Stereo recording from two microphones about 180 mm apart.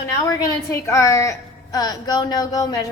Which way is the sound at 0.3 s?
15° left (ahead or behind).